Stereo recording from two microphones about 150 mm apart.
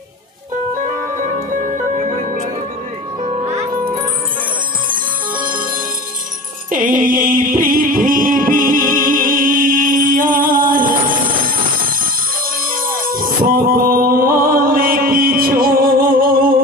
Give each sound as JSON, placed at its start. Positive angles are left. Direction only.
{"t": 2.0, "sound": "music", "side_deg": -55}
{"t": 6.7, "sound": "music", "side_deg": -65}
{"t": 13.0, "sound": "music", "side_deg": -70}